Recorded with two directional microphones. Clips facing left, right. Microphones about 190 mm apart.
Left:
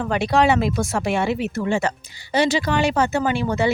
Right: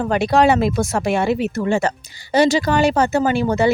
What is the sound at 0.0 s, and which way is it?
Speech, 40° right (ahead or behind).